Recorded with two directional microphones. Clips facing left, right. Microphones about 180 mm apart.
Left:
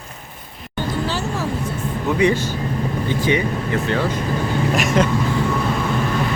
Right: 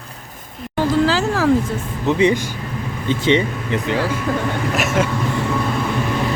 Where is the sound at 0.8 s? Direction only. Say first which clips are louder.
Right 7 dB; 90° right.